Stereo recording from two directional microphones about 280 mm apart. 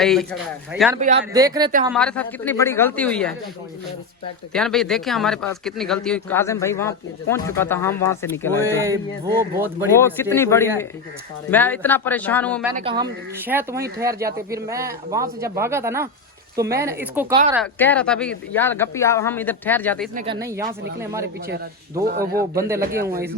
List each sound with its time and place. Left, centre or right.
0.0 s speech: centre
0.9 s speech: right
1.2 s speech: centre
1.9 s speech: centre
4.5 s speech: centre
9.3 s speech: centre
10.2 s speech: centre
12.7 s speech: centre
13.4 s speech: centre
17.5 s speech: centre
20.1 s speech: centre
22.0 s speech: right
22.5 s speech: centre